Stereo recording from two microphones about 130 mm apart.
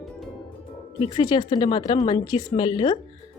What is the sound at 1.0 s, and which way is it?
A woman's voice, 35° left (ahead or behind).